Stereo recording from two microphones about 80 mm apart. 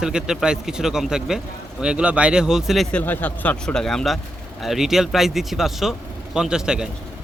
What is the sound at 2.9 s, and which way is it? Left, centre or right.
Speech, centre.